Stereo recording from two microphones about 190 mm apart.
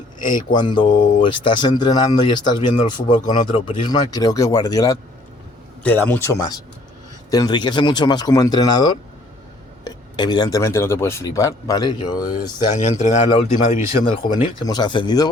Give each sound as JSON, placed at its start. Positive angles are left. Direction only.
{"t": 0.3, "sound": "speech", "side_deg": 25}
{"t": 5.8, "sound": "speech", "side_deg": 10}
{"t": 7.3, "sound": "speech", "side_deg": 20}
{"t": 12.7, "sound": "a man's voice", "side_deg": 40}
{"t": 13.2, "sound": "speech", "side_deg": 25}
{"t": 13.7, "sound": "speech", "side_deg": 45}
{"t": 14.2, "sound": "speech", "side_deg": 20}